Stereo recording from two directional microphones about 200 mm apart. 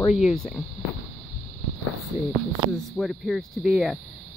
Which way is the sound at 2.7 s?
Centre (ahead or behind).